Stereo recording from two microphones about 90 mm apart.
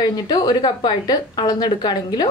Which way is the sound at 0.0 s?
50° left (ahead or behind).